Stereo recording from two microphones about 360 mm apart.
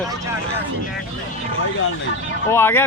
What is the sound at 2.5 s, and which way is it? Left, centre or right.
Speech, centre.